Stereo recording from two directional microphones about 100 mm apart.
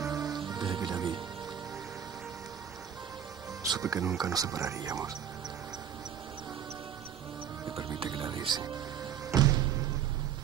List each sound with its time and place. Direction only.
0.0 s rain on surface: 40° right (ahead or behind)
0.4 s speech: 50° right (ahead or behind)
3.7 s speech: 35° right (ahead or behind)
7.7 s speech: 55° right (ahead or behind)
9.3 s music: 40° right (ahead or behind)